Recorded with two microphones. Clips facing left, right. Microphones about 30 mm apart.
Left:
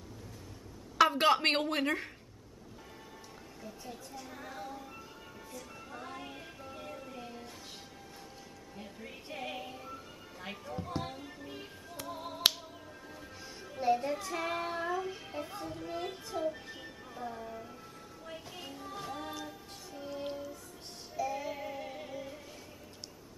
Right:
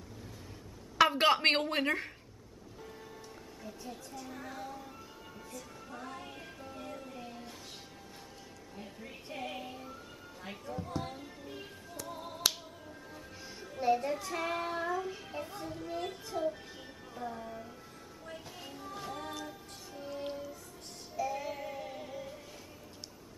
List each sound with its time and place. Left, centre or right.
1.1 s a woman's voice: centre
3.6 s a woman's voice: centre
5.5 s music: centre
8.7 s a woman's voice: centre
11.0 s finger snapping: centre
11.4 s music: centre
12.1 s finger snapping: centre
12.8 s music: centre